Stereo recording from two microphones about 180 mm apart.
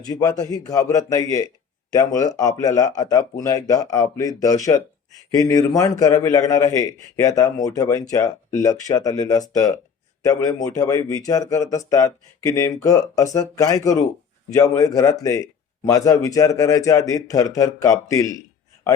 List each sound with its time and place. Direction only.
0.0 s a man's voice: 20° left (ahead or behind)